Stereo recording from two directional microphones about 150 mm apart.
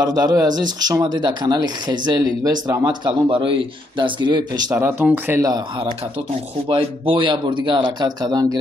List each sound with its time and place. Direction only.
0.0 s speech: 25° right (ahead or behind)
4.8 s speech: 10° right (ahead or behind)
5.4 s speech: 25° right (ahead or behind)
6.7 s speech: 35° right (ahead or behind)